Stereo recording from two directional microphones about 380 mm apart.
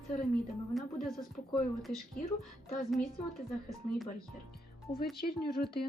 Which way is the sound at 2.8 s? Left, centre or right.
Centre.